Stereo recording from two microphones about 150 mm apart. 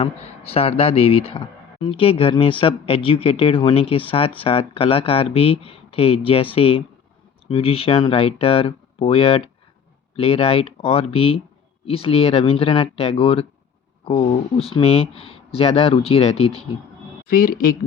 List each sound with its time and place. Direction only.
0.5 s speech: 40° left (ahead or behind)
17.2 s speech: 70° left (ahead or behind)